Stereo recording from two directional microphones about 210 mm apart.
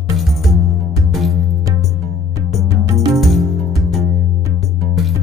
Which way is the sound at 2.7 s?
15° right (ahead or behind).